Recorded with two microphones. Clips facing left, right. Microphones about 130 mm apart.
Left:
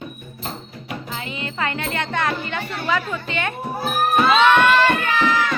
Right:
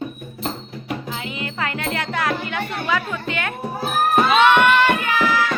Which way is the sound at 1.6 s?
Centre (ahead or behind).